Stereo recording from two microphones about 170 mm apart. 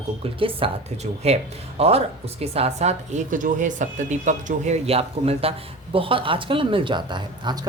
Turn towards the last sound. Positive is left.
turn(degrees=-25)  # may be behind; listen again after turning